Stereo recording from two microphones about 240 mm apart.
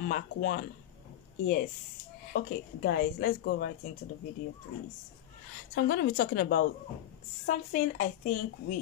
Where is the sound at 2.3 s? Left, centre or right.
Left.